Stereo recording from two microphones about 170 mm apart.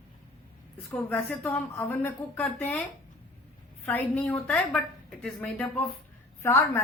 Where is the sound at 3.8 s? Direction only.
10° left (ahead or behind).